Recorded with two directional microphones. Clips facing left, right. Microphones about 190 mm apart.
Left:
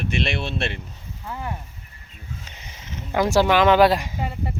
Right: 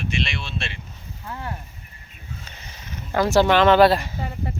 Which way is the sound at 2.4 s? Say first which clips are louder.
Even; 15° left (ahead or behind).